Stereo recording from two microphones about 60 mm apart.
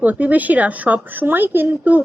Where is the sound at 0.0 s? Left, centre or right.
Right.